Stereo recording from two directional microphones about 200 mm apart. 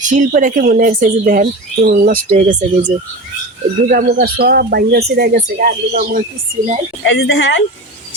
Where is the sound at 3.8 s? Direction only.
50° right (ahead or behind).